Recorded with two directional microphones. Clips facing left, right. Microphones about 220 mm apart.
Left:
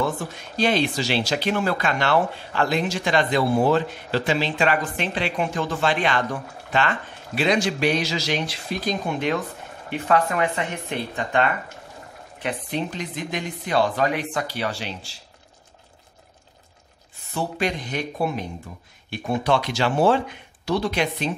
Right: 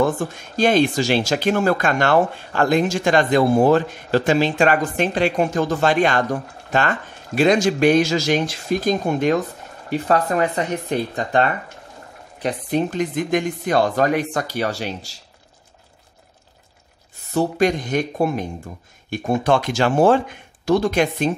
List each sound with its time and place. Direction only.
0.0 s speech: 45° right (ahead or behind)
17.3 s speech: 45° right (ahead or behind)